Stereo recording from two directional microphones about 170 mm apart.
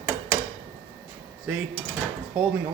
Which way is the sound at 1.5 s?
10° right (ahead or behind).